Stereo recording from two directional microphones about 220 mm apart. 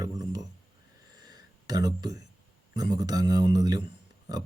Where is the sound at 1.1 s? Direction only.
20° right (ahead or behind).